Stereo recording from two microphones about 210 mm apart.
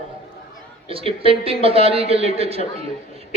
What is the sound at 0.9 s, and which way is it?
A man's voice, 25° right (ahead or behind).